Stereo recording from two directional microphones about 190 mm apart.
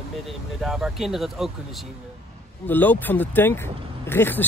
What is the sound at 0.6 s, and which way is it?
Speech, centre (ahead or behind).